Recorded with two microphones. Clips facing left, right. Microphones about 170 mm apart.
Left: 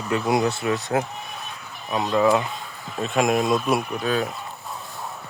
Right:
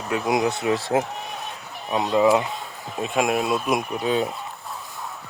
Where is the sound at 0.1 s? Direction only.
15° right (ahead or behind); by 1.0 s 30° right (ahead or behind).